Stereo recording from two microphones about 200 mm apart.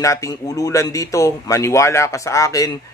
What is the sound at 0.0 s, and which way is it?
Speech, 15° left (ahead or behind).